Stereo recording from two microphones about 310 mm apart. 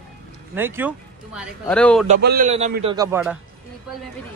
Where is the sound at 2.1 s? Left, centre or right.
Right.